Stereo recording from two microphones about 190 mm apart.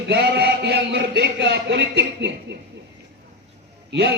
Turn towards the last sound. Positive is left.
turn(degrees=-60)  # may be behind; listen again after turning